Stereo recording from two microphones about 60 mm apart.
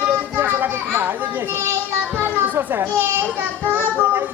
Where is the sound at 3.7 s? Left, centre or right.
Right.